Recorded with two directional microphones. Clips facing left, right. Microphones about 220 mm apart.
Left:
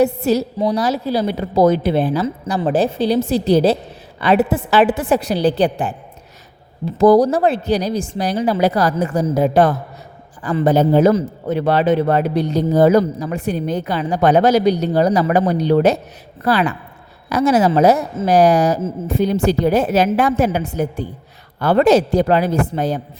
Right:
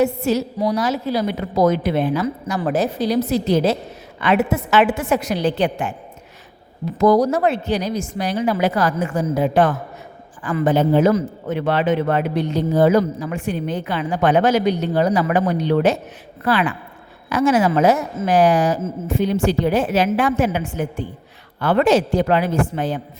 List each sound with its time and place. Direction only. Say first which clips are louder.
0.0 s a man's voice: left 3 dB; 35° left (ahead or behind)